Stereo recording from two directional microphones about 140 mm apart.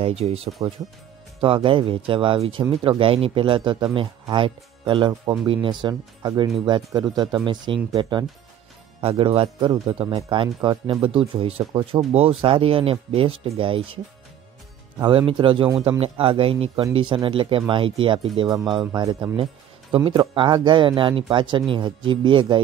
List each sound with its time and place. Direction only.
0.0 s speech: 45° right (ahead or behind)
9.0 s speech: 45° right (ahead or behind)
15.0 s speech: 35° right (ahead or behind)
19.3 s speech: 40° right (ahead or behind)